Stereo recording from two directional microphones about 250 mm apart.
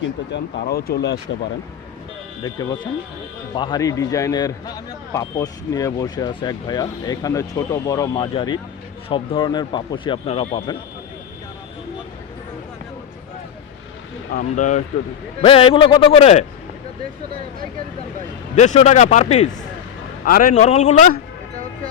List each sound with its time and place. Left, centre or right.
0.6 s speech: left
2.4 s a man's voice: centre
14.3 s a man's voice: left
18.5 s a man's voice: left